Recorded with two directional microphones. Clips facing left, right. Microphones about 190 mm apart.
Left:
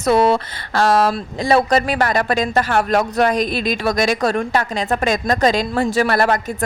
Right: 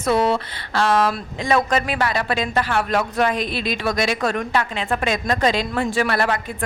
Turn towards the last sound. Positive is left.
turn(degrees=40)  # may be behind; listen again after turning